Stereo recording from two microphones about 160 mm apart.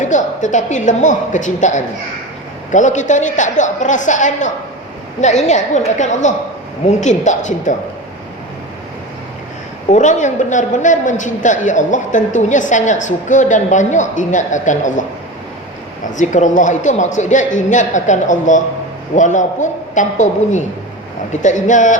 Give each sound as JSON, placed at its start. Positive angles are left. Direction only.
{"t": 0.0, "sound": "a man's voice", "side_deg": 50}
{"t": 9.9, "sound": "a man's voice", "side_deg": 50}
{"t": 16.1, "sound": "a man's voice", "side_deg": 50}